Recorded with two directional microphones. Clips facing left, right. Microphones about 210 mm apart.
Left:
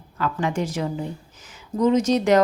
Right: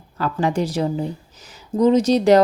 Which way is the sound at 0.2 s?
35° right (ahead or behind).